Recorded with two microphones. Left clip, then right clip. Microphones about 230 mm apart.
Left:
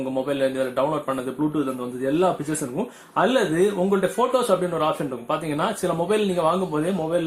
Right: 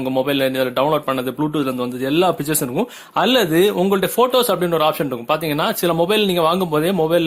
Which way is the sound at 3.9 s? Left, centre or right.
Right.